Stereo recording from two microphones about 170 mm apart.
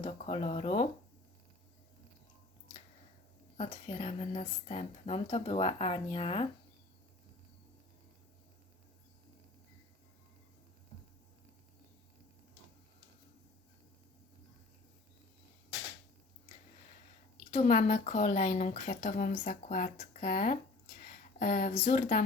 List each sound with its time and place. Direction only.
0.0 s speech: 40° left (ahead or behind)
3.6 s speech: 35° left (ahead or behind)
17.5 s speech: 45° left (ahead or behind)